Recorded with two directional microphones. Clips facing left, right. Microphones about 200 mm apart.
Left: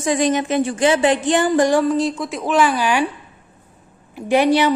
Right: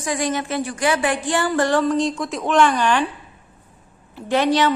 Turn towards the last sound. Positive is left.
turn(degrees=10)  # may be behind; listen again after turning